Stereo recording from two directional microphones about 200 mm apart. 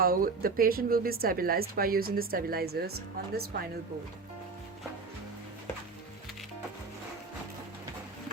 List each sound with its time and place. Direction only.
0.0 s speech: 45° right (ahead or behind)